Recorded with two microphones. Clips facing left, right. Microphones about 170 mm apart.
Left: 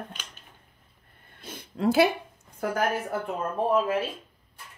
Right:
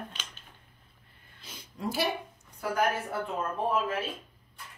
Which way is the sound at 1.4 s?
55° left (ahead or behind).